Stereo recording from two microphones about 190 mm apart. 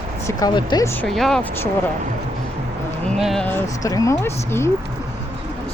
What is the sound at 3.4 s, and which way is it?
Speech, 15° left (ahead or behind).